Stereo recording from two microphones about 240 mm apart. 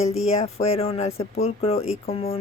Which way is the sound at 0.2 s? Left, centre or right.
Left.